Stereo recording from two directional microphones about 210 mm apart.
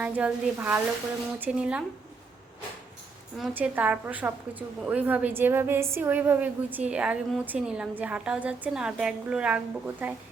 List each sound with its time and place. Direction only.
0.0 s a woman's voice: 5° right (ahead or behind)
3.3 s a woman's voice: 5° right (ahead or behind)